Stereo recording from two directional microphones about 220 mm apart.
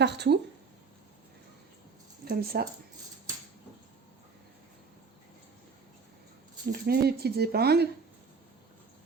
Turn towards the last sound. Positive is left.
turn(degrees=-45)  # may be behind; listen again after turning